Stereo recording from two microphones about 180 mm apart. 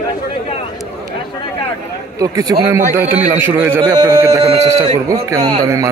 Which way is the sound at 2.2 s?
20° right (ahead or behind).